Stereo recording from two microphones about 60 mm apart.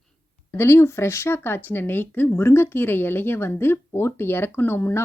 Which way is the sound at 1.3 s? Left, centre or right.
Left.